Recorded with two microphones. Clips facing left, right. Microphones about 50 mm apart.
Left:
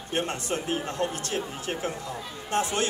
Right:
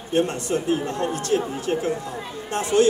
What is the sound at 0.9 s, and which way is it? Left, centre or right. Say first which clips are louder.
Speech: right 4 dB; right.